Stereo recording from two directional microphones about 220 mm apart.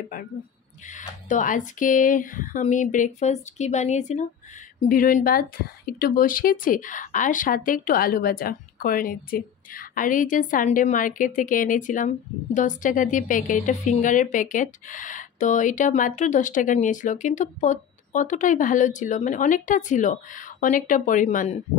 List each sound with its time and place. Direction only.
0.1 s a woman's voice: 35° left (ahead or behind)